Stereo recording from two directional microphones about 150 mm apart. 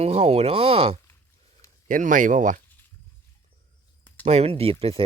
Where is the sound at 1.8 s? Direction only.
60° right (ahead or behind).